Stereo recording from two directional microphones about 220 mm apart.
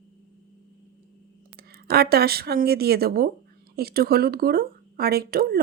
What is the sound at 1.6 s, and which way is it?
Speech, 45° right (ahead or behind).